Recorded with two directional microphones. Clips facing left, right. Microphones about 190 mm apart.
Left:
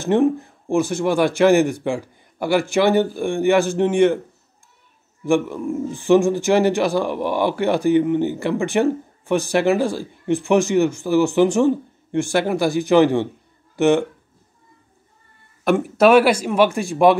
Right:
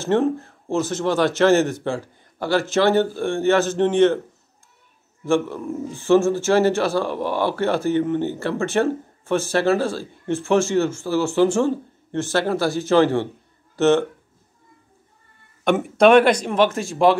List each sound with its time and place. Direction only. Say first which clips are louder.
0.0 s speech: left 2 dB; 15° left (ahead or behind)
5.2 s speech: left 2 dB; 15° left (ahead or behind)
15.6 s speech: even; 5° left (ahead or behind)